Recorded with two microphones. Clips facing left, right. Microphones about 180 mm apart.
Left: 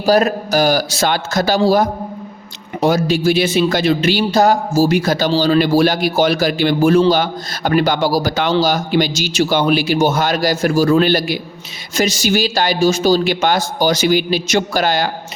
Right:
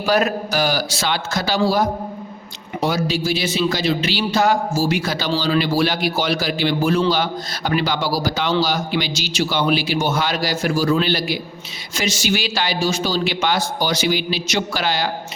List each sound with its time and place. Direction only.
0.0 s a man's voice: 35° left (ahead or behind)